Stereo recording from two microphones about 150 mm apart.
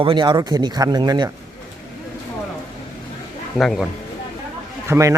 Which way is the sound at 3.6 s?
Centre (ahead or behind).